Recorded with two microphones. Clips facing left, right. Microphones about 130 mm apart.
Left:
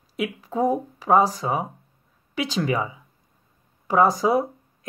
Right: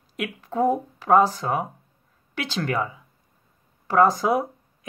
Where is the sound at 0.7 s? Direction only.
10° left (ahead or behind).